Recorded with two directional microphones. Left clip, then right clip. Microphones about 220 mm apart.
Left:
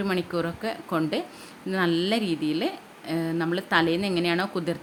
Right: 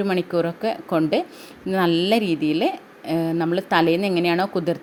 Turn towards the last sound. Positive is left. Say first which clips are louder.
# right 5 dB
turn(degrees=-15)  # may be behind; listen again after turning